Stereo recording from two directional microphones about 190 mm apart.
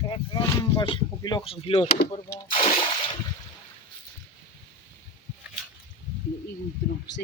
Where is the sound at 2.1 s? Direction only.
15° left (ahead or behind).